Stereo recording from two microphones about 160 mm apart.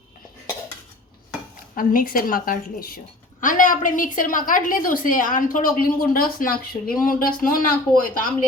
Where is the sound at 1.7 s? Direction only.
60° left (ahead or behind).